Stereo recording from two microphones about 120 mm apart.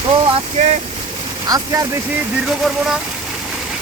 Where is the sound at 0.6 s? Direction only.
70° right (ahead or behind).